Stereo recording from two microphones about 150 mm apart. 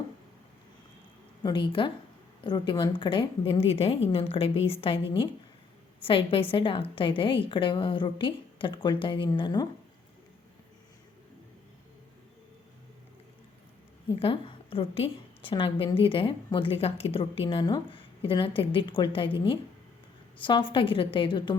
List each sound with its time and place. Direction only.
1.5 s a woman's voice: 35° left (ahead or behind)
6.0 s a woman's voice: 35° left (ahead or behind)
14.2 s a woman's voice: 40° left (ahead or behind)